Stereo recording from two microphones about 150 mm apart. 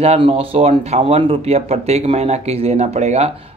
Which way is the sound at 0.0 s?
40° right (ahead or behind).